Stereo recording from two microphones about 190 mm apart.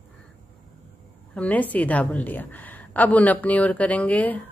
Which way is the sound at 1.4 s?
10° left (ahead or behind).